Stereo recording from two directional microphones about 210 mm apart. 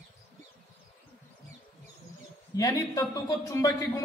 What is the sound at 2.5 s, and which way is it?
A man's voice, 15° left (ahead or behind).